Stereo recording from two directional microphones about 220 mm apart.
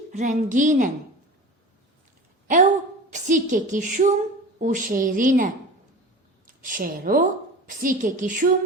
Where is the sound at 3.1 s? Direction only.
35° right (ahead or behind).